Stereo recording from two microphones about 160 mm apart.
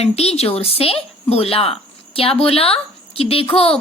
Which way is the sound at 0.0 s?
40° left (ahead or behind).